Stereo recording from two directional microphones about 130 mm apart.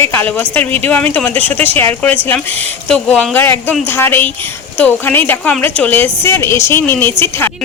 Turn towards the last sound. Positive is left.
turn(degrees=15)  # may be behind; listen again after turning